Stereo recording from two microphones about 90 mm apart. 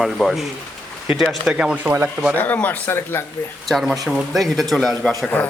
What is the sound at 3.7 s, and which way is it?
A man's voice, centre (ahead or behind).